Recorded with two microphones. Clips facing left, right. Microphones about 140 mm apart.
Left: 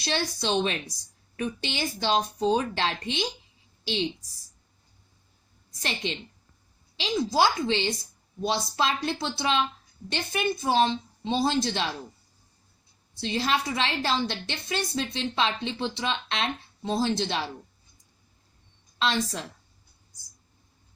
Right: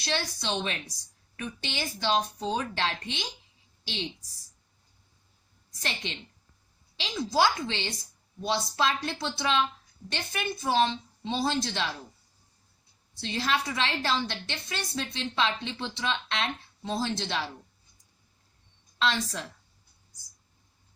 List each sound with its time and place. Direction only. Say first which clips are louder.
0.0 s a woman's voice: left 3 dB; 20° left (ahead or behind)
5.8 s a woman's voice: left 4 dB; 20° left (ahead or behind)
13.1 s a woman's voice: left 3 dB; 20° left (ahead or behind)
18.9 s a woman's voice: left 2 dB; 20° left (ahead or behind)